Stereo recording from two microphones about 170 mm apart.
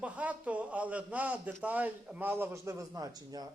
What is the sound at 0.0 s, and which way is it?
A man's voice, 10° right (ahead or behind).